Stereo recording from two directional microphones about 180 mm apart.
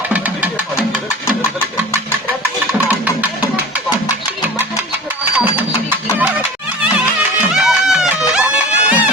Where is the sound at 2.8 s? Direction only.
10° right (ahead or behind).